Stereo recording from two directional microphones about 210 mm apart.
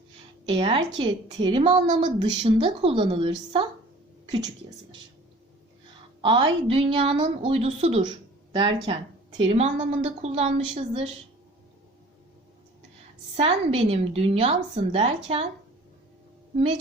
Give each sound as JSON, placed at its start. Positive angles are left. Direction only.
{"t": 0.5, "sound": "a woman's voice", "side_deg": -25}
{"t": 6.2, "sound": "a woman's voice", "side_deg": -25}
{"t": 13.3, "sound": "a woman's voice", "side_deg": -30}